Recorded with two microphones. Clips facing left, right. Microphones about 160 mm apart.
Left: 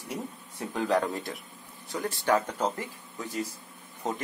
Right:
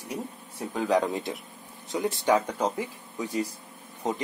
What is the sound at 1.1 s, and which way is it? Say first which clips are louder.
Speech: right 3 dB; 20° right (ahead or behind).